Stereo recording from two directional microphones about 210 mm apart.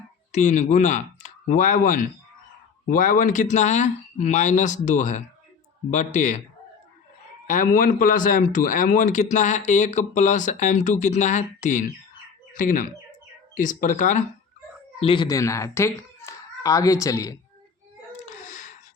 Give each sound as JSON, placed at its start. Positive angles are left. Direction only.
{"t": 0.3, "sound": "a man's voice", "side_deg": 35}
{"t": 7.4, "sound": "a man's voice", "side_deg": 40}
{"t": 15.0, "sound": "speech", "side_deg": 20}
{"t": 18.3, "sound": "a sound", "side_deg": 35}